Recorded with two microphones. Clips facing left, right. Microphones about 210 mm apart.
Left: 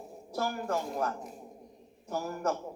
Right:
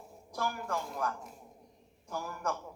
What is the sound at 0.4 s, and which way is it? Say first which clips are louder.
A man's voice: left 3 dB; 35° left (ahead or behind).